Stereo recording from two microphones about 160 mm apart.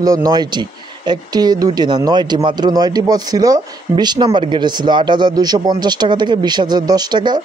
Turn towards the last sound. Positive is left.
turn(degrees=-25)  # may be behind; listen again after turning